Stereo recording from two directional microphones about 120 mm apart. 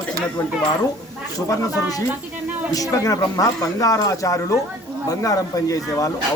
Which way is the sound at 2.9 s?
30° left (ahead or behind).